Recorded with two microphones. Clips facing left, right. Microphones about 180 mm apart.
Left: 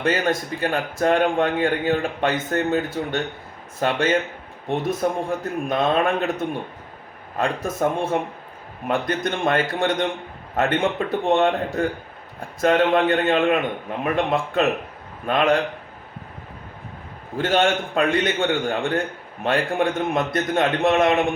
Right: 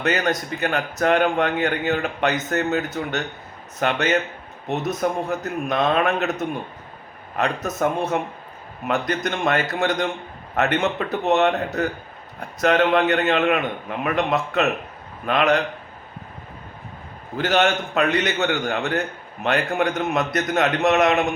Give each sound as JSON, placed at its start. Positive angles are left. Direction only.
{"t": 0.3, "sound": "a man's voice", "side_deg": 30}
{"t": 7.4, "sound": "a man's voice", "side_deg": 30}
{"t": 8.9, "sound": "a man's voice", "side_deg": 30}
{"t": 17.3, "sound": "a man's voice", "side_deg": 30}